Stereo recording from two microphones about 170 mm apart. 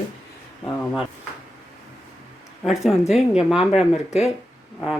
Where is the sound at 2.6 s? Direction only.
Centre (ahead or behind).